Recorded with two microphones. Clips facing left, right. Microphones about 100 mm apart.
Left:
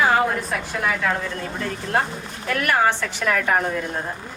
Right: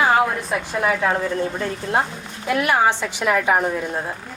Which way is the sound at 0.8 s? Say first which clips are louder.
Right 3 dB; 20° right (ahead or behind).